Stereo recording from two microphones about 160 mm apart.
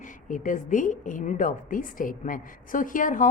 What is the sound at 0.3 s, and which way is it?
A woman's voice, 55° left (ahead or behind).